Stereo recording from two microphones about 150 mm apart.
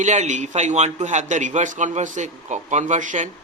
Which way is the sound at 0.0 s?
55° right (ahead or behind).